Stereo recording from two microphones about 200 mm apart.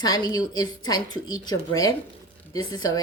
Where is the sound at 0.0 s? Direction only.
20° left (ahead or behind).